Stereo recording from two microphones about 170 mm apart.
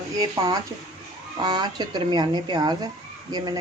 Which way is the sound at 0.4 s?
20° right (ahead or behind).